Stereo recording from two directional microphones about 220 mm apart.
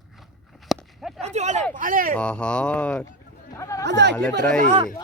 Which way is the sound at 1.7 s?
40° right (ahead or behind).